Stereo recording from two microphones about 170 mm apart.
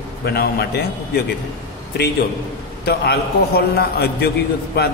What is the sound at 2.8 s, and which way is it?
Speech, 70° left (ahead or behind).